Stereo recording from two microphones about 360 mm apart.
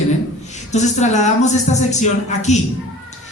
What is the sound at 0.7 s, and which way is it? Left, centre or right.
A man's voice, centre.